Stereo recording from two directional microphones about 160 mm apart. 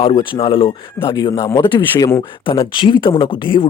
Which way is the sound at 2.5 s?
30° left (ahead or behind).